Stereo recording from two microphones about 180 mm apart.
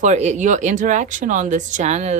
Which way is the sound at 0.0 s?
40° right (ahead or behind).